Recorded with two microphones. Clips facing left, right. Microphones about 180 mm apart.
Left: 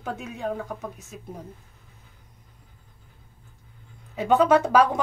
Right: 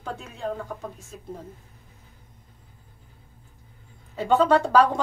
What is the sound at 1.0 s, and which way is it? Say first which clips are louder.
Speech: right 1 dB; 20° left (ahead or behind).